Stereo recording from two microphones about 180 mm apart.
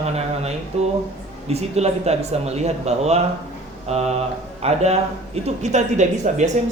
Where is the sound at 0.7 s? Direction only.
35° right (ahead or behind).